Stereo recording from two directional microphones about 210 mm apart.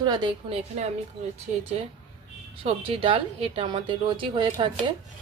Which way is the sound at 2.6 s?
25° right (ahead or behind).